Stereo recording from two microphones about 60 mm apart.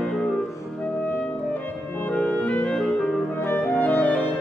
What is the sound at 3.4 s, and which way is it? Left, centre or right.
Clarinet, left.